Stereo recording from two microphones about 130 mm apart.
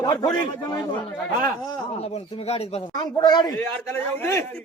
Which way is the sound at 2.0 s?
50° left (ahead or behind).